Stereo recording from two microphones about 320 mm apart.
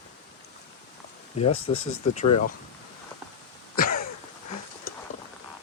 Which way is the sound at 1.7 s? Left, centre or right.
Left.